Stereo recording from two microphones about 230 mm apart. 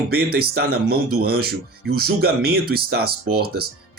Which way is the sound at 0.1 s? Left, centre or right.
Right.